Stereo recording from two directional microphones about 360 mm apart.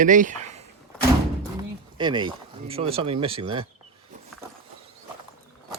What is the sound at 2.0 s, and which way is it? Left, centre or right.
Speech, centre.